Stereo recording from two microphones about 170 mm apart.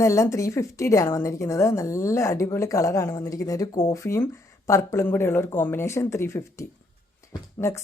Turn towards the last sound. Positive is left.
turn(degrees=15)  # may be behind; listen again after turning